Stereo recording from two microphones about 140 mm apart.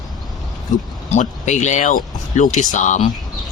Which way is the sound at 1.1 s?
55° left (ahead or behind).